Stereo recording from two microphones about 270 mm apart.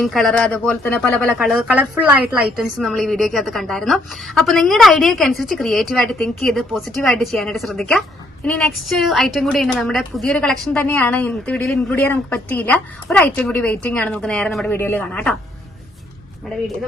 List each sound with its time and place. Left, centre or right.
0.0 s a woman's voice: centre
2.7 s a woman's voice: centre